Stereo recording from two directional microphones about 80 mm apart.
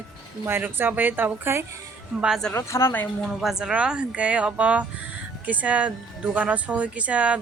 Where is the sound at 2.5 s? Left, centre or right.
Left.